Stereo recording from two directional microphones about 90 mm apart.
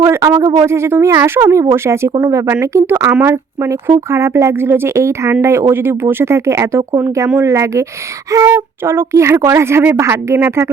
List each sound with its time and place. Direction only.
0.0 s speech: 30° right (ahead or behind)
0.3 s speech: 45° right (ahead or behind)
0.6 s speech: 30° right (ahead or behind)